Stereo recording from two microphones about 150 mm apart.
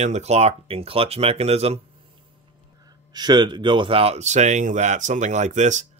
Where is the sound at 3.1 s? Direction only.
30° right (ahead or behind); by 5.8 s 55° right (ahead or behind).